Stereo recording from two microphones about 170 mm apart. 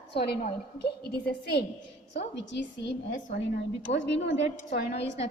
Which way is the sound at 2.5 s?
90° left.